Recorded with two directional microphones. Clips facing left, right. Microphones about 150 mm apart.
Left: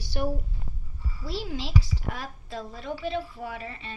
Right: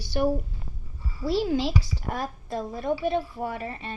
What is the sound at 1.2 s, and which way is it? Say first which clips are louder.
A woman's voice: right 9 dB; 45° right (ahead or behind).